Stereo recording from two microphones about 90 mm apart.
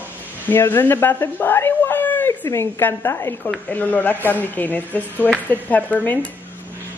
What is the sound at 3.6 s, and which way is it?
Speech, 20° left (ahead or behind).